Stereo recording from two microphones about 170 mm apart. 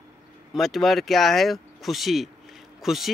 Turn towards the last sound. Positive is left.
turn(degrees=0)  # may be behind; listen again after turning